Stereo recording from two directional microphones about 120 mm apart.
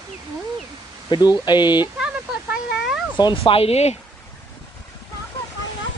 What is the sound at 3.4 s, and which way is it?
Speech, 55° left (ahead or behind).